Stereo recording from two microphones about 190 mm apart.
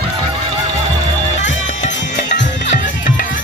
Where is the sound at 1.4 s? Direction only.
75° left (ahead or behind).